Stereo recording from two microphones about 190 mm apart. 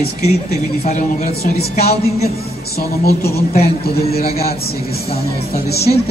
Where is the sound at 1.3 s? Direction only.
55° left (ahead or behind).